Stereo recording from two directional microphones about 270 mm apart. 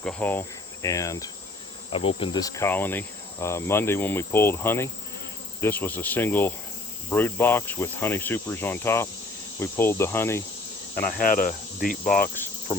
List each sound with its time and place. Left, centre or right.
0.0 s insect: centre
1.9 s speech: centre
11.2 s speech: left